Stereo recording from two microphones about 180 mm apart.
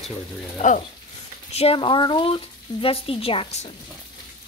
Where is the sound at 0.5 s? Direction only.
40° left (ahead or behind).